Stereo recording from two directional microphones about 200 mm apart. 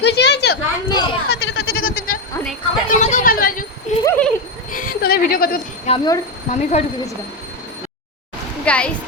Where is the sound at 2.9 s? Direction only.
40° left (ahead or behind).